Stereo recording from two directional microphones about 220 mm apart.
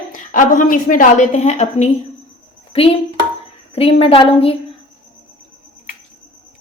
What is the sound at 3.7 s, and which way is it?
Speech, 25° left (ahead or behind).